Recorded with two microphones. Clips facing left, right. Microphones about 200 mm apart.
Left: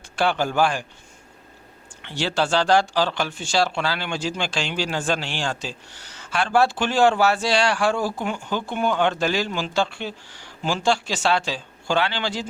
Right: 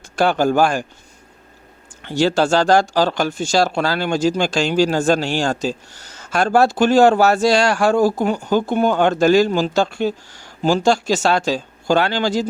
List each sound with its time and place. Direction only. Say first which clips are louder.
0.2 s speech: right 5 dB; 45° right (ahead or behind)
2.0 s speech: right 8 dB; 40° right (ahead or behind)